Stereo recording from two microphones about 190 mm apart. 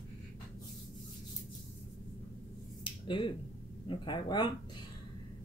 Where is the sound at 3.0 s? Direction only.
25° left (ahead or behind).